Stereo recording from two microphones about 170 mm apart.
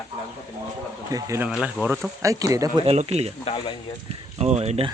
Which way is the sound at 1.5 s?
5° right (ahead or behind).